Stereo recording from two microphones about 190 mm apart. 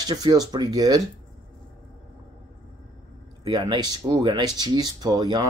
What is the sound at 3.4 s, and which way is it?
Speech, 25° right (ahead or behind).